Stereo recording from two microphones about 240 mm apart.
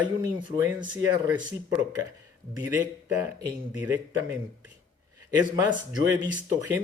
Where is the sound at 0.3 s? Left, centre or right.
Centre.